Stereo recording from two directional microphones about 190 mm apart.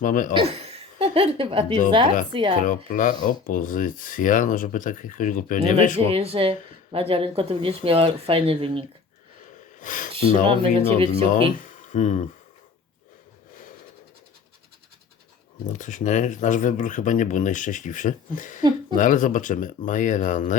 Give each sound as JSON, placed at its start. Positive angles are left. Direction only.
{"t": 0.0, "sound": "speech", "side_deg": 45}
{"t": 0.3, "sound": "a woman's voice", "side_deg": -30}
{"t": 2.6, "sound": "speech", "side_deg": 45}
{"t": 6.1, "sound": "speech", "side_deg": -30}
{"t": 9.8, "sound": "speech", "side_deg": 45}
{"t": 10.2, "sound": "speech", "side_deg": -30}
{"t": 11.5, "sound": "speech", "side_deg": 45}
{"t": 15.7, "sound": "speech", "side_deg": 40}